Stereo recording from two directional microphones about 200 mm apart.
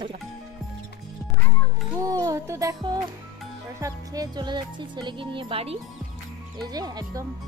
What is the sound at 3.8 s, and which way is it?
Speech, 20° right (ahead or behind).